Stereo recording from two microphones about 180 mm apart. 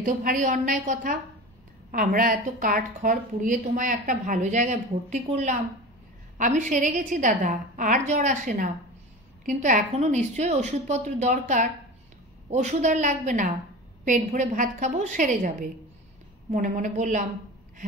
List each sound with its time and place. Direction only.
0.0 s a woman's voice: 45° right (ahead or behind)